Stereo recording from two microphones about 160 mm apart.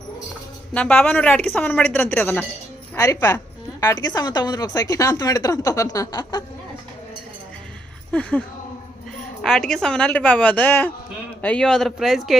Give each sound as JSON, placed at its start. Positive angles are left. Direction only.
{"t": 0.7, "sound": "a woman's voice", "side_deg": 10}
{"t": 8.1, "sound": "speech", "side_deg": 10}